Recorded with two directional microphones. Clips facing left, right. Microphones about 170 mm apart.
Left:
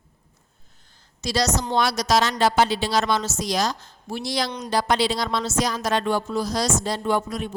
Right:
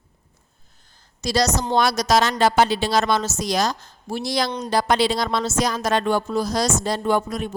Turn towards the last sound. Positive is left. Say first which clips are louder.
# right 2 dB
turn(degrees=-45)  # may be behind; listen again after turning